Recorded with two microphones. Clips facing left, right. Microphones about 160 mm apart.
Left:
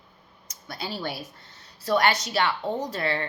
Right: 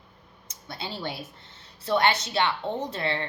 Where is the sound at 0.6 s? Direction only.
25° right (ahead or behind).